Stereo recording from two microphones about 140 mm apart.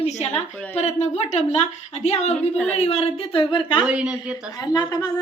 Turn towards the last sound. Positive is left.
turn(degrees=30)  # may be behind; listen again after turning